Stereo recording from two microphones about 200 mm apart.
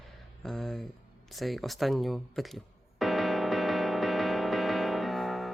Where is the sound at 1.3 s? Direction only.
Centre (ahead or behind).